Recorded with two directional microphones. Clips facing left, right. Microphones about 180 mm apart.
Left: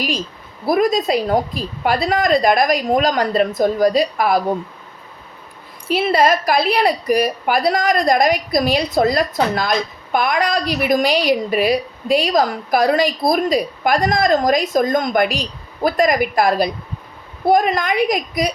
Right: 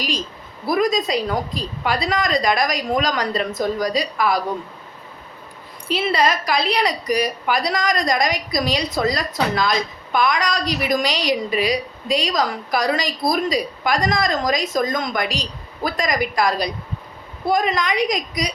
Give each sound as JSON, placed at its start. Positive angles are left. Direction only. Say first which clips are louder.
{"t": 0.7, "sound": "a woman's voice", "louder": "left 3 dB", "side_deg": 50}
{"t": 5.9, "sound": "a woman's voice", "louder": "left 4 dB", "side_deg": 50}